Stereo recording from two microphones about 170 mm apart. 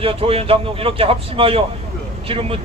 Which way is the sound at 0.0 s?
35° right (ahead or behind).